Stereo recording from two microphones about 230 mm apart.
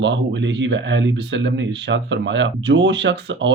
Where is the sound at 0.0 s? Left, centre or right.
Right.